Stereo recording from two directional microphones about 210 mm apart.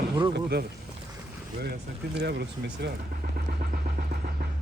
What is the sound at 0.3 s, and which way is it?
Speech, 50° right (ahead or behind).